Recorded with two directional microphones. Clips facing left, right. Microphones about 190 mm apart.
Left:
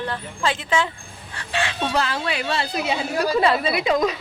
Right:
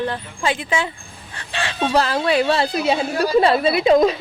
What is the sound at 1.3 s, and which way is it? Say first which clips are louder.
Speech: right 1 dB; 35° right (ahead or behind).